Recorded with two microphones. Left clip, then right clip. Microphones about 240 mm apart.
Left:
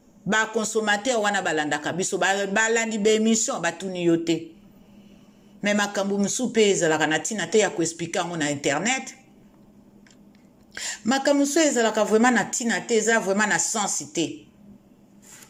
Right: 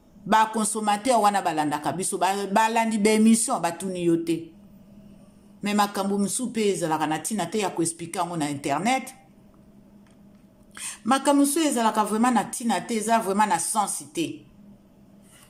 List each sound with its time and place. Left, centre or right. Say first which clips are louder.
0.3 s a man's voice: right 2 dB; centre
5.6 s a man's voice: left 1 dB; right
10.8 s a woman's voice: even; centre